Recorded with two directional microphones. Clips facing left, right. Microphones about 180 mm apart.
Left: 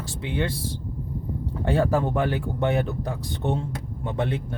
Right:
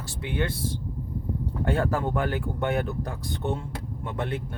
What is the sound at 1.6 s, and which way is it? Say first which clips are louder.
Speech: left 4 dB; 25° left (ahead or behind).